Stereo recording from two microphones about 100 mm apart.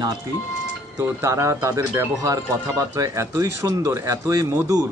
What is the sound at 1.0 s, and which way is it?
Speech, 30° right (ahead or behind).